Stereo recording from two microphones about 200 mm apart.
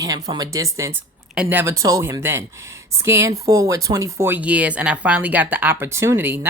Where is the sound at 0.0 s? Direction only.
20° right (ahead or behind).